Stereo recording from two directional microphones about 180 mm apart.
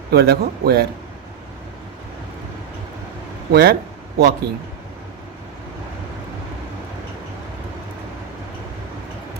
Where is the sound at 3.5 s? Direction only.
60° right (ahead or behind).